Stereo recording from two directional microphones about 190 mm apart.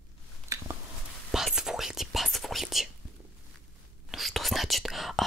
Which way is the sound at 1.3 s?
Centre (ahead or behind).